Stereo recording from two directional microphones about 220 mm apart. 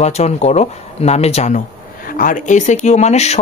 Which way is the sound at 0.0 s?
30° left (ahead or behind).